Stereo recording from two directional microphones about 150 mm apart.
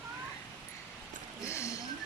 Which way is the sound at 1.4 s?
20° left (ahead or behind).